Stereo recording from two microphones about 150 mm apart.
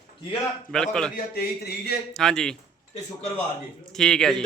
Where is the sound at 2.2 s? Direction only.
5° left (ahead or behind).